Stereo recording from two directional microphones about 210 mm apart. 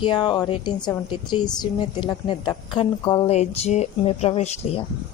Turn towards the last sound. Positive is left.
turn(degrees=30)  # may be behind; listen again after turning